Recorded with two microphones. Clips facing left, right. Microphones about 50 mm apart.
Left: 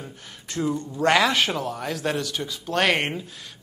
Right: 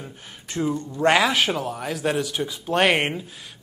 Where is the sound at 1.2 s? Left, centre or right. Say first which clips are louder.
Right 1 dB; centre.